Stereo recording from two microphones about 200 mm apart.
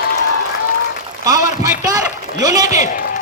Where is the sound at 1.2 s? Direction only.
15° right (ahead or behind).